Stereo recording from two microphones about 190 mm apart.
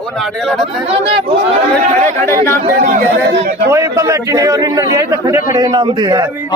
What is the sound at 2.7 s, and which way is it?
Speech, 50° right (ahead or behind).